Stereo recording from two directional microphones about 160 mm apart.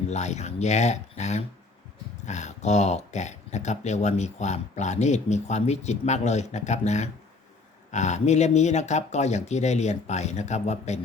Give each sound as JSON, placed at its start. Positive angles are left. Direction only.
{"t": 0.1, "sound": "speech", "side_deg": 45}